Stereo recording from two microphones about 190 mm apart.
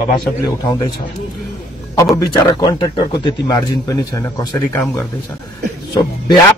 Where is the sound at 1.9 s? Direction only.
15° left (ahead or behind).